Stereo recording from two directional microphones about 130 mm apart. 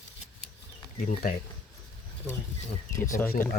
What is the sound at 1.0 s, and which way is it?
Speech, 90° left.